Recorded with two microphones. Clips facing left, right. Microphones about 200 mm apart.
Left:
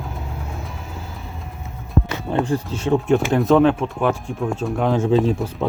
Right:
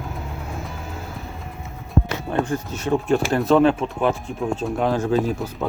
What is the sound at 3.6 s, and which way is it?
Speech, 10° right (ahead or behind).